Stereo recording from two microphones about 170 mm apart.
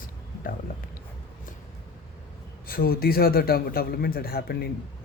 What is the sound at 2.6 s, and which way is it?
A man's voice, 60° left (ahead or behind).